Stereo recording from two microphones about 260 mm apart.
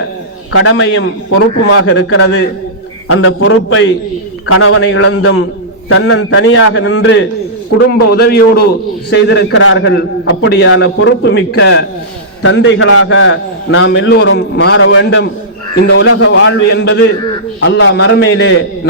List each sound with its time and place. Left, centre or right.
0.5 s a man's voice: left